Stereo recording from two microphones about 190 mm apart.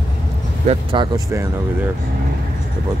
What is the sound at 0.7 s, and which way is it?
Speech, 25° right (ahead or behind).